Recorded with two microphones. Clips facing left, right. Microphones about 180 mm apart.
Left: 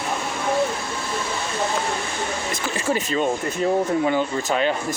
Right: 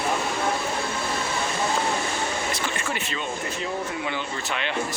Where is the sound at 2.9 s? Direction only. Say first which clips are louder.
Left 9 dB; 40° left (ahead or behind).